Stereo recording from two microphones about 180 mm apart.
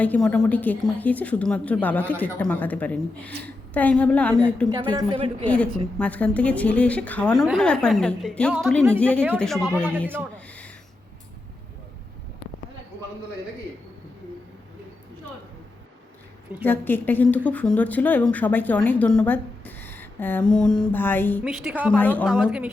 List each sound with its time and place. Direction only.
0.0 s a woman's voice: 10° left (ahead or behind)
4.7 s a woman's voice: 25° right (ahead or behind)
5.5 s a woman's voice: 10° left (ahead or behind)
9.6 s speech: 10° right (ahead or behind)
16.6 s a woman's voice: 10° left (ahead or behind)
21.4 s a woman's voice: 5° right (ahead or behind)
21.9 s a woman's voice: 10° left (ahead or behind)
22.4 s speech: 5° right (ahead or behind)